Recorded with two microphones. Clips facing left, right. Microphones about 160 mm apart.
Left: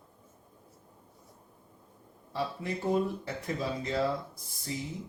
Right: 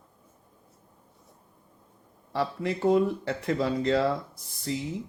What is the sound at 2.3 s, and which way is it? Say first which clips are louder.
A man's voice: right 5 dB; 80° right.